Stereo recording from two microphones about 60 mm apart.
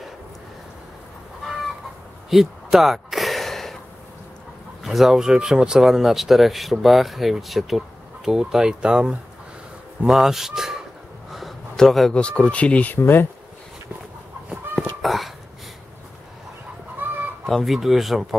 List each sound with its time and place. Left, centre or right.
2.2 s a sound: centre
4.8 s speech: centre
11.7 s speech: centre
12.1 s speech: centre
12.9 s speech: left
15.0 s a sound: centre
17.0 s chicken: right
17.5 s speech: centre